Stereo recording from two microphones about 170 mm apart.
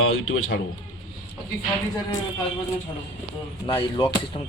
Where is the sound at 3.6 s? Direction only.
30° left (ahead or behind).